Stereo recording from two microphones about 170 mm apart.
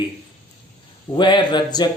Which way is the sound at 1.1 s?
25° left (ahead or behind).